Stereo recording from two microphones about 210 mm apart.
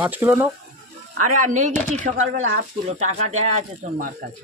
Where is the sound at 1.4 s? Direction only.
35° right (ahead or behind).